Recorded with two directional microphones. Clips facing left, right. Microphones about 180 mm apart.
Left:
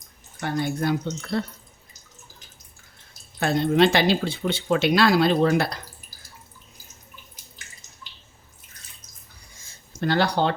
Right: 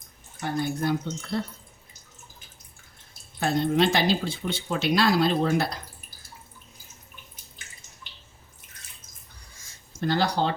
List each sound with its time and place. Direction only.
0.3 s speech: 80° left
3.4 s speech: 70° left (ahead or behind)
10.0 s speech: 65° left (ahead or behind)